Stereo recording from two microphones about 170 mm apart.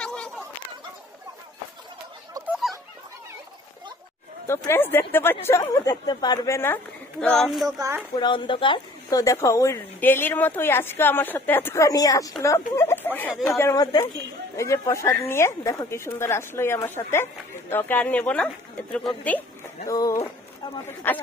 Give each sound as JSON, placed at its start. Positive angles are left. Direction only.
{"t": 0.0, "sound": "a sound", "side_deg": 5}
{"t": 2.4, "sound": "dog", "side_deg": -5}
{"t": 4.5, "sound": "speech", "side_deg": 15}
{"t": 7.8, "sound": "speech", "side_deg": -10}
{"t": 8.2, "sound": "speech", "side_deg": 30}
{"t": 19.9, "sound": "speech", "side_deg": 20}